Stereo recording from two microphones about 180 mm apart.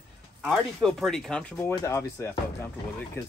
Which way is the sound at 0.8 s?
Centre (ahead or behind).